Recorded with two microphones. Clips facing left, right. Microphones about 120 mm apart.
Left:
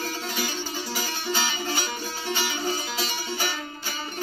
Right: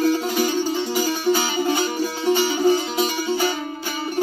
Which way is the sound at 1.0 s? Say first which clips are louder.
Right 8 dB; 45° right (ahead or behind).